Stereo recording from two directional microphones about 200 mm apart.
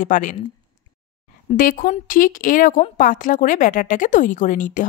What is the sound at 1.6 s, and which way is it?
Speech, 45° left (ahead or behind).